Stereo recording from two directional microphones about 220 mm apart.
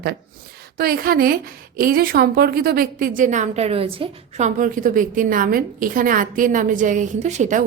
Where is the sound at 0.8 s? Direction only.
40° right (ahead or behind).